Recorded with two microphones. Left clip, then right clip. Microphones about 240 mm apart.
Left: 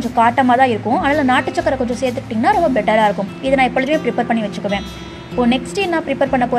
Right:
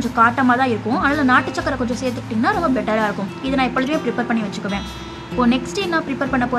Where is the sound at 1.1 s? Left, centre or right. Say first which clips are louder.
Even; centre.